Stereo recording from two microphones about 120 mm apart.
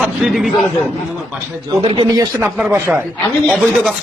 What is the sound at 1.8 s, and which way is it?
Speech, 45° right (ahead or behind).